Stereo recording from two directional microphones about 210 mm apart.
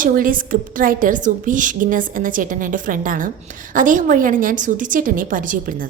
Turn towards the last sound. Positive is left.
turn(degrees=-40)  # may be behind; listen again after turning